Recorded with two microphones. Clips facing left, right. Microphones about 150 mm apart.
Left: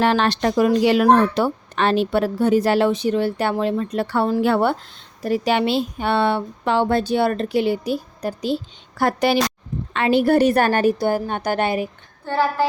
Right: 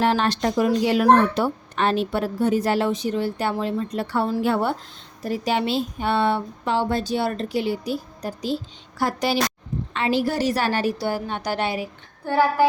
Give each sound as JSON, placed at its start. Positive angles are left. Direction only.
{"t": 0.0, "sound": "a woman's voice", "side_deg": 75}
{"t": 12.2, "sound": "speech", "side_deg": -10}